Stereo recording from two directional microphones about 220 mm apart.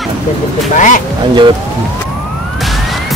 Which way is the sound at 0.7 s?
35° left (ahead or behind).